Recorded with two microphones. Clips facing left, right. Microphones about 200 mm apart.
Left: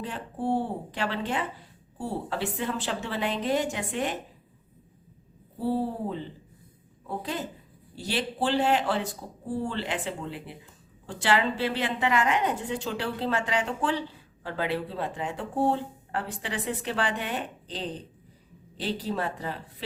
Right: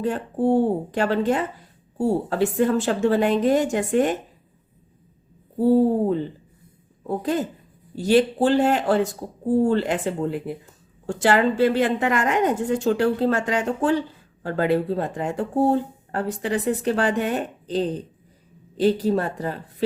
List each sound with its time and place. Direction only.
0.0 s speech: 45° right (ahead or behind)
7.2 s speech: 45° right (ahead or behind)